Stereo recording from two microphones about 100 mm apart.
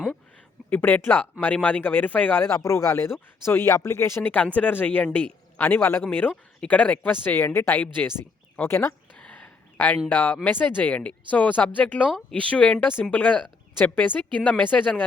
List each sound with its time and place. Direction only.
0.7 s speech: 15° left (ahead or behind)
9.1 s a sound: 10° left (ahead or behind)
9.7 s speech: 15° left (ahead or behind)